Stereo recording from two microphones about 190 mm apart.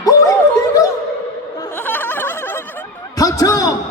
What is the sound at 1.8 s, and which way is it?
Snicker, 10° left (ahead or behind).